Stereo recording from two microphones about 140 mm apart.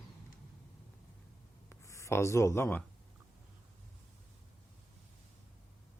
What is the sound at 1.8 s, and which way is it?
Speech, 20° left (ahead or behind).